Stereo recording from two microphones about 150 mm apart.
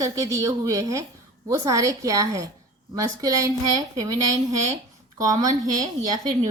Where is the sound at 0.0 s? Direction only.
20° right (ahead or behind).